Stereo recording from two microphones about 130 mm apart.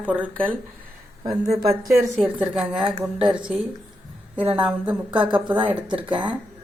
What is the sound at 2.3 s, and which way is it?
Speech, 5° right (ahead or behind).